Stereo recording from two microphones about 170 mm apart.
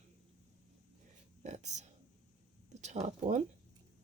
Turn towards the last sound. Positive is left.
turn(degrees=-45)  # may be behind; listen again after turning